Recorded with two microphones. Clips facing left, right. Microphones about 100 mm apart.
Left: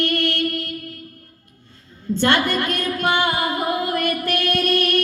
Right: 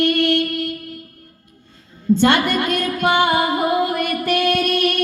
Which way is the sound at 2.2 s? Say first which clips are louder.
Even; 15° right (ahead or behind).